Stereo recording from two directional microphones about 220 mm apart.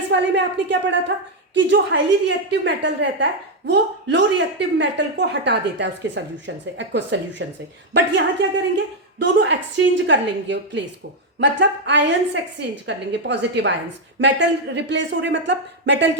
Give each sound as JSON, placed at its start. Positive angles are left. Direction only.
{"t": 0.1, "sound": "speech", "side_deg": -55}